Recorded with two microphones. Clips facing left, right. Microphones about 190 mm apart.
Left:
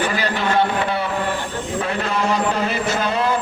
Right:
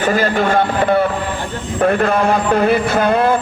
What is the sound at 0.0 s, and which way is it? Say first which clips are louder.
A man's voice: right 6 dB; 45° right (ahead or behind).